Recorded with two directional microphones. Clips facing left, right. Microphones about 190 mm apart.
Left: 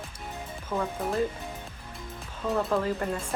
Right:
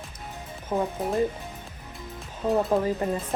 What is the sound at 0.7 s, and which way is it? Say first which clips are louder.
Speech: right 4 dB; 20° right (ahead or behind).